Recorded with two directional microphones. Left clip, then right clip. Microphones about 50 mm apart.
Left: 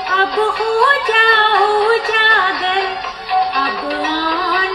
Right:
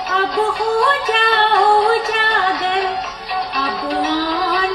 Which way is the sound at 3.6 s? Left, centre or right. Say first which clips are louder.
Left 1 dB; centre.